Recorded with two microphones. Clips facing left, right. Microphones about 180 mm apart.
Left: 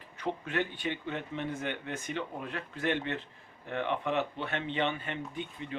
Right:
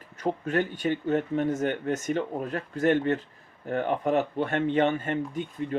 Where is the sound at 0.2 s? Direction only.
40° right (ahead or behind).